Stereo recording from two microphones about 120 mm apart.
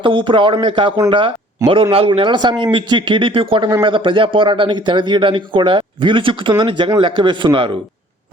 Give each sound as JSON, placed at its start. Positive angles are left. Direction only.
{"t": 0.0, "sound": "a man's voice", "side_deg": -45}